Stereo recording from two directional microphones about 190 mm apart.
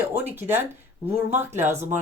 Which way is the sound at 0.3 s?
10° right (ahead or behind).